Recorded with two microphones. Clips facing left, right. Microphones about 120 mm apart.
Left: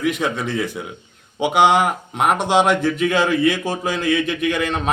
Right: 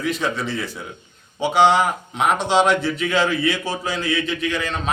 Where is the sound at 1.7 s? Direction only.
55° left (ahead or behind).